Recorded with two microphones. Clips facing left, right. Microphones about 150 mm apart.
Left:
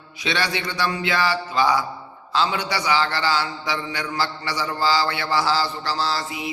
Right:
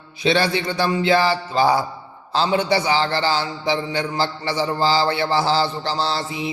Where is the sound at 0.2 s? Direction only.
30° right (ahead or behind).